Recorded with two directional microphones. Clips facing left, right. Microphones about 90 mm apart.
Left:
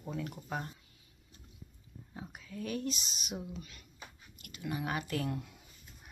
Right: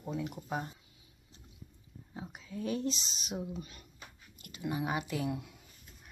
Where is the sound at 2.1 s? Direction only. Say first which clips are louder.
Right 2 dB; 20° right (ahead or behind).